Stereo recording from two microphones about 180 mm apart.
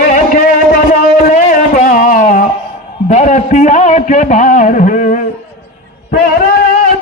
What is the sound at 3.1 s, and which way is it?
A man's voice, 45° left (ahead or behind).